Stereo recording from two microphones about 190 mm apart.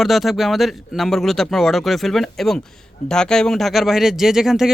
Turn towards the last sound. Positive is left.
turn(degrees=0)  # may be behind; listen again after turning